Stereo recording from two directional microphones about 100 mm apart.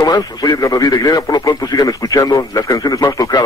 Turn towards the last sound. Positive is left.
turn(degrees=35)  # may be behind; listen again after turning